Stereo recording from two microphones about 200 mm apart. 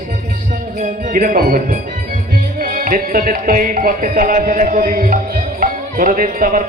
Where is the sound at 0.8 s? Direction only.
45° right (ahead or behind).